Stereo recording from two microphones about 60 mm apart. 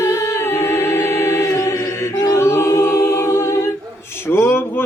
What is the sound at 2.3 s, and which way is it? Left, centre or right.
A capella, left.